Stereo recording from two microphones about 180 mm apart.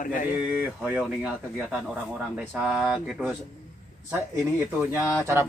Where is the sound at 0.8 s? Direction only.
5° right (ahead or behind).